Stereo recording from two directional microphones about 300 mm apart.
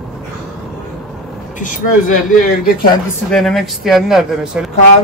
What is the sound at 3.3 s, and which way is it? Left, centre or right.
Speech, centre.